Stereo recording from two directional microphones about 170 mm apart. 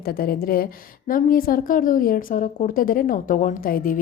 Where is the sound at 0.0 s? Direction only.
60° left (ahead or behind).